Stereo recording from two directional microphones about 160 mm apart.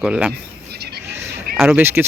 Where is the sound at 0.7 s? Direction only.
85° right.